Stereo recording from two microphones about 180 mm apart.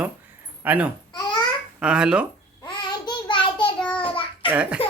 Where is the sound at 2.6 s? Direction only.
25° left (ahead or behind).